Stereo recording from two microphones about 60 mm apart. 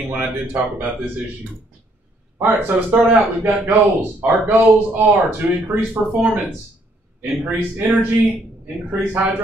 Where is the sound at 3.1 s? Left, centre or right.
Right.